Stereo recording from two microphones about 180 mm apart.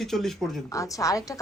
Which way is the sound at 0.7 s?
20° left (ahead or behind).